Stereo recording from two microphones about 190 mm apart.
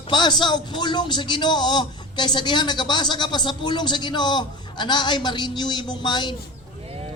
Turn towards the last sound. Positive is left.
turn(degrees=25)  # may be behind; listen again after turning